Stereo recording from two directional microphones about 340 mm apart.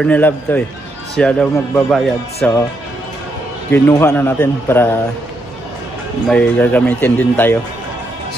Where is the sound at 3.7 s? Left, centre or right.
Centre.